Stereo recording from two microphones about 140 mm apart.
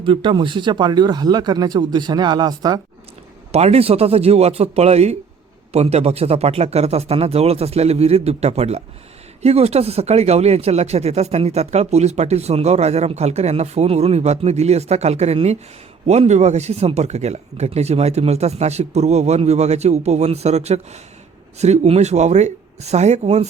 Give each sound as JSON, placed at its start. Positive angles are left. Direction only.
{"t": 0.0, "sound": "speech", "side_deg": -35}
{"t": 3.5, "sound": "speech", "side_deg": -50}